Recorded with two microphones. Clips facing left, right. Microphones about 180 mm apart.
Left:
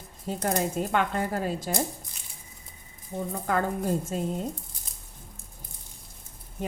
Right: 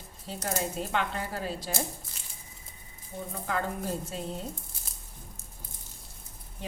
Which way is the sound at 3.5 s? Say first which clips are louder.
Left 5 dB; 50° left (ahead or behind).